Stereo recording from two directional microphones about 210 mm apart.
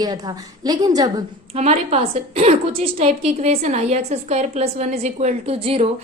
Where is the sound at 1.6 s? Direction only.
30° right (ahead or behind).